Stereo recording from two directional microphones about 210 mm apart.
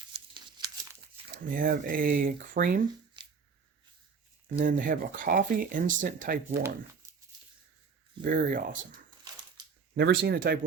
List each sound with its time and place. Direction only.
0.1 s crumpling: 20° right (ahead or behind)
1.4 s speech: 40° right (ahead or behind)
4.7 s speech: 40° right (ahead or behind)
8.2 s speech: 40° right (ahead or behind)
9.9 s speech: 50° right (ahead or behind)